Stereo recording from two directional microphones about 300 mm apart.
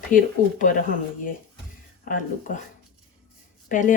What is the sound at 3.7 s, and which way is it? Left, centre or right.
Speech, left.